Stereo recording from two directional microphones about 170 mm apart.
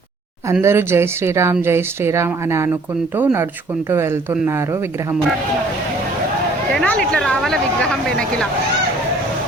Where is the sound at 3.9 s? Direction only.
15° right (ahead or behind).